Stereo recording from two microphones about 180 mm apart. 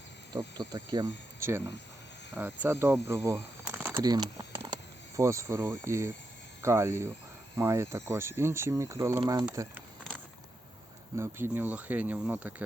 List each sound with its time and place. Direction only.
0.3 s speech: 25° right (ahead or behind)
11.2 s speech: 10° right (ahead or behind)